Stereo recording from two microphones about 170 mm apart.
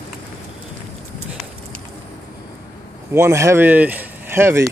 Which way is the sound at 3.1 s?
15° right (ahead or behind).